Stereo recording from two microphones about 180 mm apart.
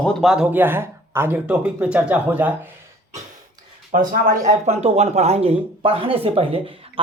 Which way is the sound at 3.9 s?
50° right (ahead or behind).